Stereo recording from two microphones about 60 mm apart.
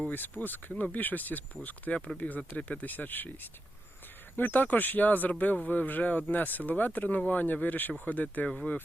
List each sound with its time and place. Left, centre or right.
0.1 s speech: left